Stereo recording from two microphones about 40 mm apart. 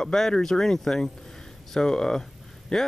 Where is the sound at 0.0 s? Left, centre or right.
Centre.